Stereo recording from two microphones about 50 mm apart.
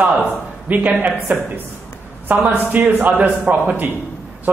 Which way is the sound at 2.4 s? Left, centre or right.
Right.